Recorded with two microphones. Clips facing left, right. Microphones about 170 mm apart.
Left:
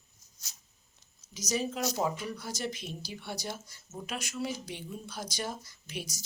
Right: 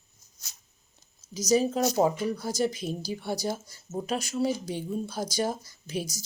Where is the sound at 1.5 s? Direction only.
35° right (ahead or behind).